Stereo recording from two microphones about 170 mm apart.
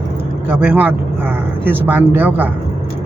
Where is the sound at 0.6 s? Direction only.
10° right (ahead or behind).